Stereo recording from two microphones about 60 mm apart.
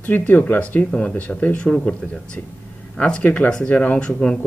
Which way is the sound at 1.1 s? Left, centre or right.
Left.